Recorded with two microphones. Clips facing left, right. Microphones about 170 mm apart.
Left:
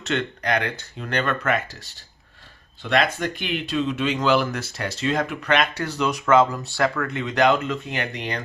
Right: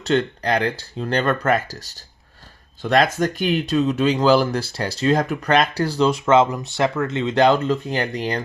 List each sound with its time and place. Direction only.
0.0 s speech: 35° right (ahead or behind)